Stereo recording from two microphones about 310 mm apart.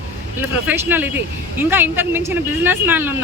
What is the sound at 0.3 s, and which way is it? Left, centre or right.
Speech, centre.